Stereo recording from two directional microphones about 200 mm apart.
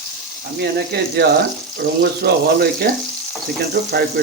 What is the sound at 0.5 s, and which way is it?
Speech, 55° right (ahead or behind).